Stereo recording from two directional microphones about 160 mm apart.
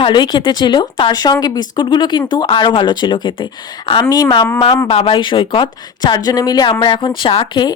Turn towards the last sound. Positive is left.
turn(degrees=35)  # may be behind; listen again after turning